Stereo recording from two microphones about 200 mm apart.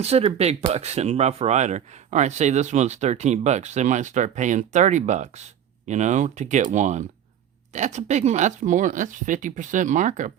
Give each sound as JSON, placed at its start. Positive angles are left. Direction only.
{"t": 0.0, "sound": "speech", "side_deg": -30}